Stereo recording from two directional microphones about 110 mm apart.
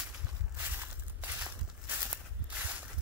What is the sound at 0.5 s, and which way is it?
Walk, 15° right (ahead or behind).